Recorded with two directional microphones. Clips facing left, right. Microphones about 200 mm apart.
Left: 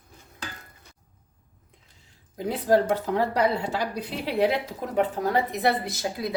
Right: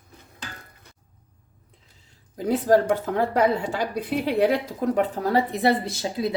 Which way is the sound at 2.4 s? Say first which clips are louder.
Right 3 dB; 45° right (ahead or behind).